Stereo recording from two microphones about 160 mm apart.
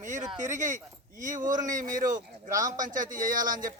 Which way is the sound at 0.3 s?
50° right (ahead or behind).